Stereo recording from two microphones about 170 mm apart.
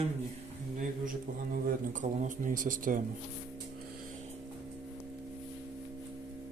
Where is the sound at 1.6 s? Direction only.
50° right (ahead or behind).